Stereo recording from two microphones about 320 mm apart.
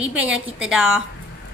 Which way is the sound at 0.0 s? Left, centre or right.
Centre.